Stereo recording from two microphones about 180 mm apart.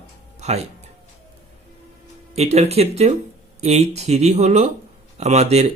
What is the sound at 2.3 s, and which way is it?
Speech, 35° right (ahead or behind).